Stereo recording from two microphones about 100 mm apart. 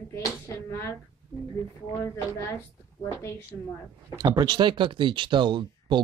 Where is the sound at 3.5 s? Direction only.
10° left (ahead or behind).